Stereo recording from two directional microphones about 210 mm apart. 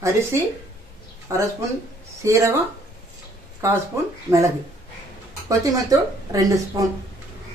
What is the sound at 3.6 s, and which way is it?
Speech, 10° right (ahead or behind).